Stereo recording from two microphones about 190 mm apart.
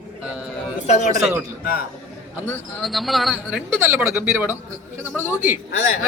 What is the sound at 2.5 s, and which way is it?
Speech, centre (ahead or behind).